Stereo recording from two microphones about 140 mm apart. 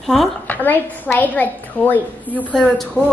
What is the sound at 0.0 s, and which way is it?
Speech, centre (ahead or behind).